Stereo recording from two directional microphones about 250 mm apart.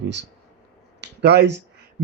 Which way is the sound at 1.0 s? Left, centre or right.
Right.